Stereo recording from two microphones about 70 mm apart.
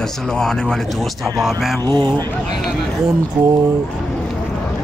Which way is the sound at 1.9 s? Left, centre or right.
Right.